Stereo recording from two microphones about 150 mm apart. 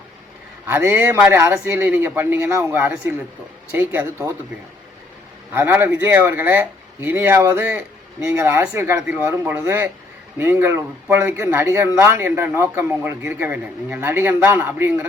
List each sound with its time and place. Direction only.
0.7 s speech: 15° right (ahead or behind)
5.5 s speech: 15° right (ahead or behind)